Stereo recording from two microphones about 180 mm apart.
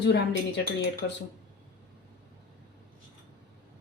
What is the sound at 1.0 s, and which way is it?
Speech, 90° left.